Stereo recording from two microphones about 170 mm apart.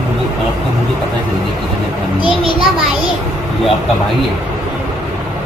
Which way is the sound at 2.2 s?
30° right (ahead or behind).